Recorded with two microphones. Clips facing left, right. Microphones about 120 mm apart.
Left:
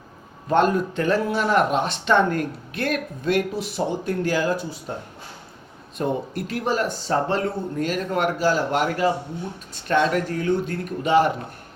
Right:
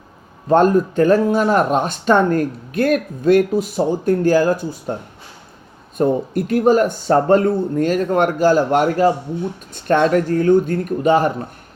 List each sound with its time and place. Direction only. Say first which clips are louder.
0.4 s speech: right 6 dB; 40° right (ahead or behind)
6.0 s speech: right 8 dB; 45° right (ahead or behind)